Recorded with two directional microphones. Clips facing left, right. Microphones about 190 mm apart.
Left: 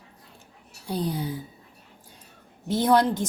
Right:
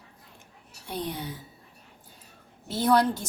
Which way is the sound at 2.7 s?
15° left (ahead or behind).